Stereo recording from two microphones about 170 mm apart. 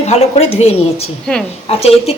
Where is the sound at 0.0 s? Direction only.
40° left (ahead or behind).